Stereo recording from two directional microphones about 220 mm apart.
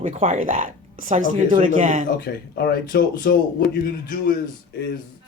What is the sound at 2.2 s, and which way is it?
Speech, 45° left (ahead or behind).